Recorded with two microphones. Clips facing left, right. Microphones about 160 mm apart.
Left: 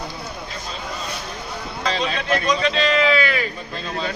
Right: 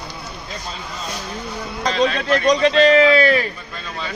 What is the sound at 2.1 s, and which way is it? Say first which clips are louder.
A man's voice: right 4 dB; 40° right (ahead or behind).